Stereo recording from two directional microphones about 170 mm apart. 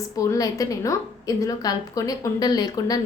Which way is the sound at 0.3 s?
20° left (ahead or behind).